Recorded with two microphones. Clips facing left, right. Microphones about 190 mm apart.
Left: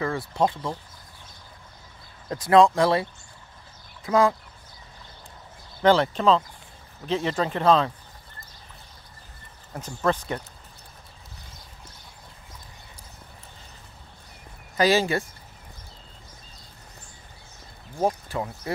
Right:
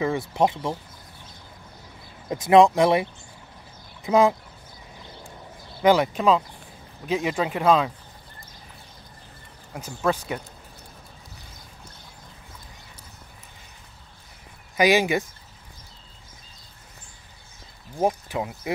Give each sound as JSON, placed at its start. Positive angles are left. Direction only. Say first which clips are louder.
{"t": 0.0, "sound": "speech", "louder": "right 2 dB", "side_deg": -20}
{"t": 2.2, "sound": "speech", "louder": "right 2 dB", "side_deg": -20}
{"t": 5.8, "sound": "speech", "louder": "right 1 dB", "side_deg": -10}
{"t": 9.8, "sound": "speech", "louder": "even", "side_deg": -5}
{"t": 14.8, "sound": "speech", "louder": "right 1 dB", "side_deg": -15}
{"t": 17.9, "sound": "speech", "louder": "right 1 dB", "side_deg": -15}